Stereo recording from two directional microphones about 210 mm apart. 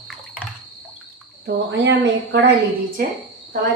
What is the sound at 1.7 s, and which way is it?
Speech, 55° right (ahead or behind).